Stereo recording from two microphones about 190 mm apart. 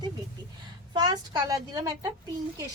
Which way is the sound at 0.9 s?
20° right (ahead or behind).